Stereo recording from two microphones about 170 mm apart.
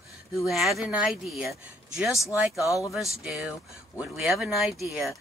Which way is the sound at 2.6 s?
20° left (ahead or behind).